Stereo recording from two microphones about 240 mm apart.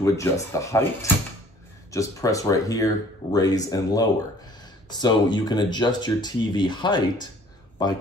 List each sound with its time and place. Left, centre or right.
0.0 s speech: centre